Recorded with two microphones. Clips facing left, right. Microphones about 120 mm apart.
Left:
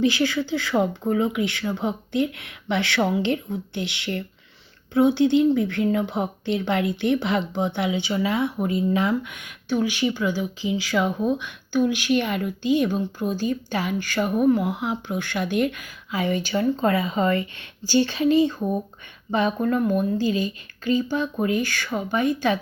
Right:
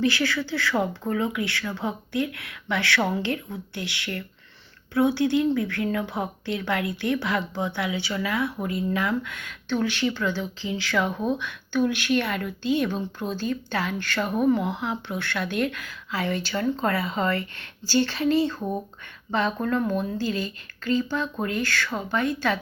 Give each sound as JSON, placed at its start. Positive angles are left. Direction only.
{"t": 0.0, "sound": "a woman's voice", "side_deg": 20}